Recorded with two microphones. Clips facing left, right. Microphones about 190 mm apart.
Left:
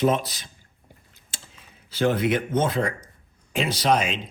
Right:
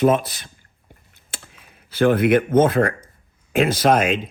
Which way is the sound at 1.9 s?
55° right (ahead or behind).